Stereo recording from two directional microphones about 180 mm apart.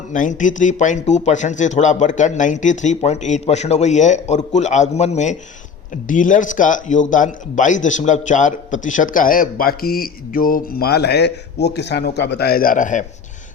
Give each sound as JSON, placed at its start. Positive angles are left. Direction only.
{"t": 0.1, "sound": "a man's voice", "side_deg": 45}